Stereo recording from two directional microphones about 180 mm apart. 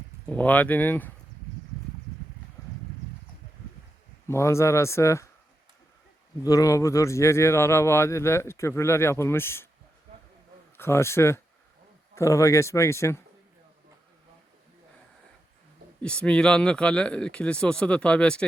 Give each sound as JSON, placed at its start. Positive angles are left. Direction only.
{"t": 0.3, "sound": "speech", "side_deg": 10}
{"t": 4.3, "sound": "speech", "side_deg": 15}
{"t": 6.4, "sound": "speech", "side_deg": 20}
{"t": 10.8, "sound": "speech", "side_deg": 15}
{"t": 16.0, "sound": "speech", "side_deg": 5}